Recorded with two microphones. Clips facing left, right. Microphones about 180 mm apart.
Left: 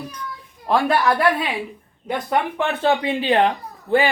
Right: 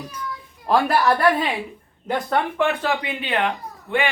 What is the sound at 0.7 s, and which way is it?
Speech, centre (ahead or behind).